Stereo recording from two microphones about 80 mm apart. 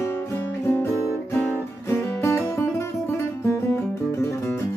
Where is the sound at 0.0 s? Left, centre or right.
Left.